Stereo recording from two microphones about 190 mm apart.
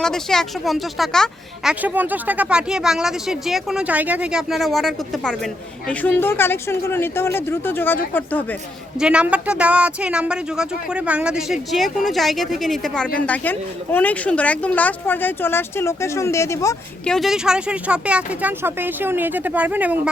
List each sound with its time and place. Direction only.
0.0 s speech: 5° left (ahead or behind)
9.0 s speech: 5° right (ahead or behind); by 16.7 s 15° left (ahead or behind)
17.1 s speech: centre (ahead or behind)